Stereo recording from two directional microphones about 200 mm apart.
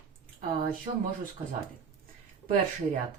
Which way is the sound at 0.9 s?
30° right (ahead or behind).